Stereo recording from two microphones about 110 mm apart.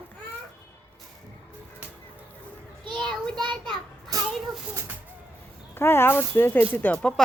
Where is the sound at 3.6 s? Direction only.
45° right (ahead or behind).